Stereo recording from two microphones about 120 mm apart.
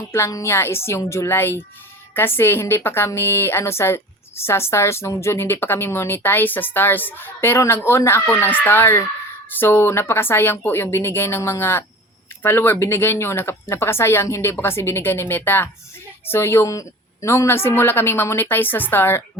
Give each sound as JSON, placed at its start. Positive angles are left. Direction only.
{"t": 0.1, "sound": "a woman's voice", "side_deg": 25}